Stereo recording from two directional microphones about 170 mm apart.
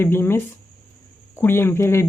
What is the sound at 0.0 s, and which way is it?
Speech, 15° left (ahead or behind).